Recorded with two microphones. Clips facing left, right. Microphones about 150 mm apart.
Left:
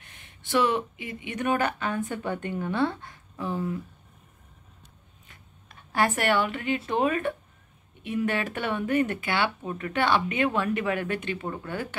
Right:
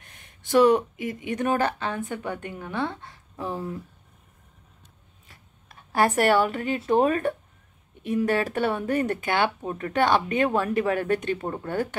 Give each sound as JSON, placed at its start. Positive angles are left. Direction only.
{"t": 0.0, "sound": "speech", "side_deg": -45}
{"t": 2.2, "sound": "a woman's voice", "side_deg": -10}
{"t": 3.3, "sound": "speech", "side_deg": -35}
{"t": 5.3, "sound": "speech", "side_deg": -40}